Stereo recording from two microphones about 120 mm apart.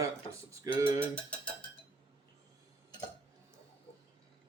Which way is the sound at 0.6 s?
25° right (ahead or behind).